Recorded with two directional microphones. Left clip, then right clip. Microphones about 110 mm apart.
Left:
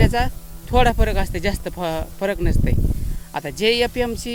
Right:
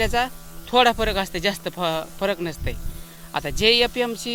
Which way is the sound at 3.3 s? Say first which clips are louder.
Right 1 dB; 30° left (ahead or behind).